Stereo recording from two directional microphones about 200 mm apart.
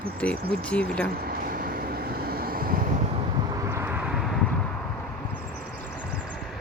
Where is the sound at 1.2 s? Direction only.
45° right (ahead or behind).